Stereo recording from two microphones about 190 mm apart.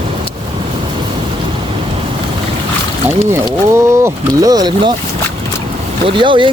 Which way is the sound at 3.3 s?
15° right (ahead or behind).